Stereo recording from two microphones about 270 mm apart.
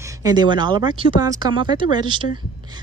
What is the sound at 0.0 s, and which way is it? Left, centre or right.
A woman's voice, centre.